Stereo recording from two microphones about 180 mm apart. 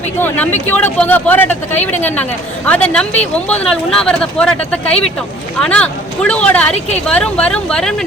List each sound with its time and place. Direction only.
0.2 s speech: 10° left (ahead or behind)
6.7 s a woman's voice: 35° left (ahead or behind)
7.1 s speech: 5° left (ahead or behind)